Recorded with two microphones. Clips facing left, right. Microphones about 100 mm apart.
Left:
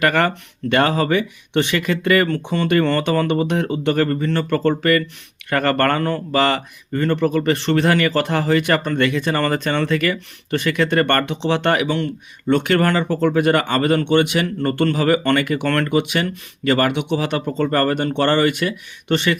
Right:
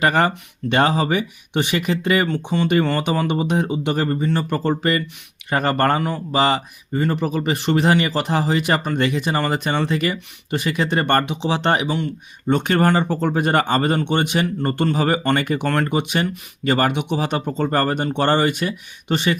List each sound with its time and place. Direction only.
0.0 s speech: 20° right (ahead or behind)
6.3 s speech: 20° right (ahead or behind)
11.9 s speech: 5° right (ahead or behind)
12.5 s speech: 20° right (ahead or behind)
13.2 s speech: 30° right (ahead or behind)